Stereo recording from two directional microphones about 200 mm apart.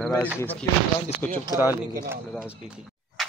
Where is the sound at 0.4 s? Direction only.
10° left (ahead or behind).